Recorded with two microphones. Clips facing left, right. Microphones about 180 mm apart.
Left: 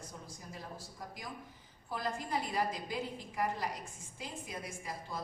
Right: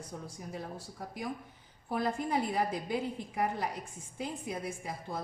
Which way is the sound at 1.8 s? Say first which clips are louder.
Right 6 dB; 60° right (ahead or behind).